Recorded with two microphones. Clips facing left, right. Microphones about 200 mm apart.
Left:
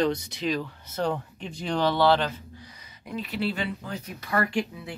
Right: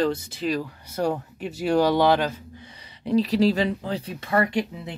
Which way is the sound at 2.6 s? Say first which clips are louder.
Right 11 dB; 30° right (ahead or behind).